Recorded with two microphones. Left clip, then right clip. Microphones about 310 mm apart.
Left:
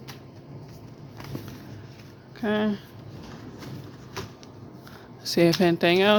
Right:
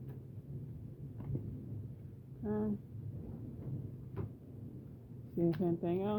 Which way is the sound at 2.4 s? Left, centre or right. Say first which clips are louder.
Left 13 dB; left.